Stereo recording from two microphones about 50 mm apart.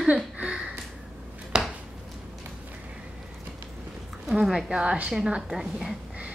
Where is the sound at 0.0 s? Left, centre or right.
Right.